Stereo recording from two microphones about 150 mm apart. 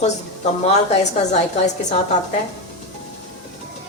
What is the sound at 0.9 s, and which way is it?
Speech, 50° left (ahead or behind).